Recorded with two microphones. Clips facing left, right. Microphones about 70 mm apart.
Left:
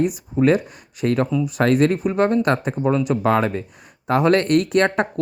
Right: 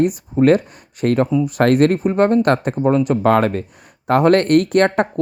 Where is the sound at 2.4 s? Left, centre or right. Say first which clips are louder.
Right 4 dB; right.